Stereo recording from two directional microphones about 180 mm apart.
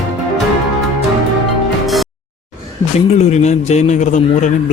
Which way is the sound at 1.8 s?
Centre (ahead or behind).